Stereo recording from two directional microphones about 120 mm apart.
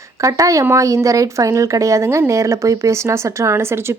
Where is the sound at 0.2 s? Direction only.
25° right (ahead or behind).